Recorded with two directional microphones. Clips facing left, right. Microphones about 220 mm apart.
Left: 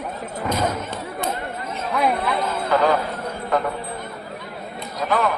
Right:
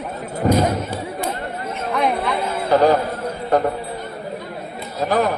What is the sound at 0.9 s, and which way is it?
Chatter, 10° right (ahead or behind).